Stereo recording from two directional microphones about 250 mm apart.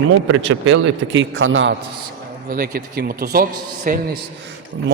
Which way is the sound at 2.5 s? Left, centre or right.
Right.